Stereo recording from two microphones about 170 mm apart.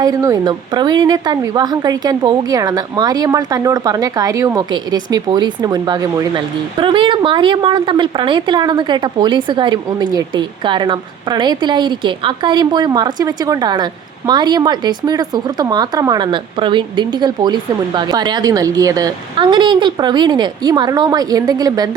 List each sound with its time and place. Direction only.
0.0 s speech: 20° right (ahead or behind)